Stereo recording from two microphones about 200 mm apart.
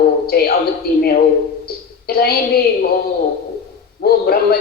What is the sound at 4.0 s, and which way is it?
Speech, 50° left (ahead or behind).